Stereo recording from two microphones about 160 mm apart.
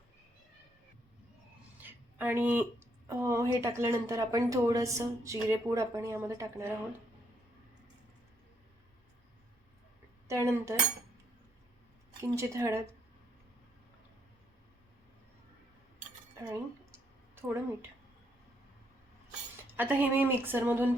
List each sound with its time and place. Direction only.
1.8 s a woman's voice: 10° right (ahead or behind)
10.2 s a woman's voice: 20° right (ahead or behind)
12.3 s a woman's voice: 20° right (ahead or behind)
16.4 s a sound: 20° right (ahead or behind)
19.7 s a woman's voice: 10° right (ahead or behind)